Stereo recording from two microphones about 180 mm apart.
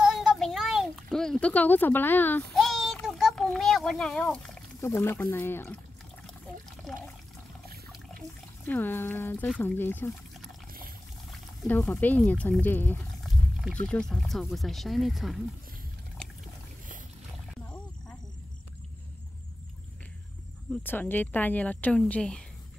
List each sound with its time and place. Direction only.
0.0 s a sound: 5° right (ahead or behind)
8.6 s speech: 10° left (ahead or behind)
11.6 s speech: 5° left (ahead or behind)
13.2 s wild animals: centre (ahead or behind)
13.8 s speech: 5° left (ahead or behind)
16.2 s pour: 5° left (ahead or behind)
20.8 s speech: 10° left (ahead or behind)